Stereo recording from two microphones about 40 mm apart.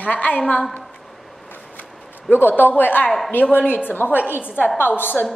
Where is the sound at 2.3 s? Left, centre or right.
Left.